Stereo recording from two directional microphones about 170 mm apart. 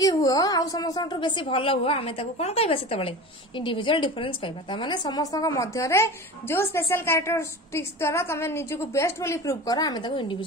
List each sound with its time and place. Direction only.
0.0 s a woman's voice: 20° left (ahead or behind)